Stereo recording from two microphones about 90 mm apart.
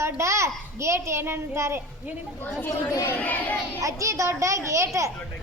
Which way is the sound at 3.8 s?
35° right (ahead or behind).